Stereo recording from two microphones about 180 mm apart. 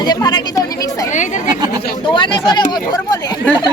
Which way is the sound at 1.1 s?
45° left (ahead or behind).